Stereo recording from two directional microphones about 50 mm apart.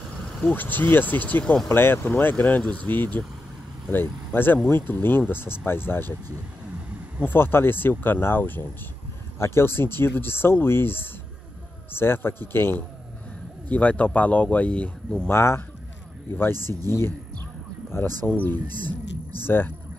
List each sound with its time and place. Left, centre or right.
0.5 s speech: left
1.7 s speech: left
2.6 s speech: left
3.9 s speech: left
7.2 s speech: left
9.4 s speech: left
13.7 s speech: left
15.2 s speech: left